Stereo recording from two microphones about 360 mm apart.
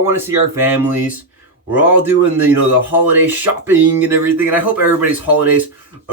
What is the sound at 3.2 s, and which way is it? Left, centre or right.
Speech, centre.